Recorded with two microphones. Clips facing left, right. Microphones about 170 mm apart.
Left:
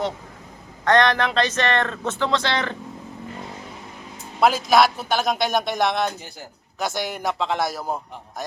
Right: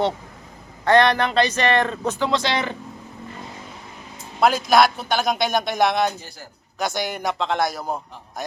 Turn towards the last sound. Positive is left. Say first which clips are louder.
# right 1 dB
turn(degrees=5)  # may be behind; listen again after turning